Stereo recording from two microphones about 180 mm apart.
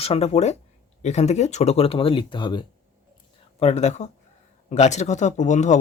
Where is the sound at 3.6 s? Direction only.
35° left (ahead or behind).